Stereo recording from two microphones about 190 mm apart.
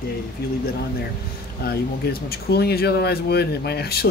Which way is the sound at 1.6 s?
55° left (ahead or behind).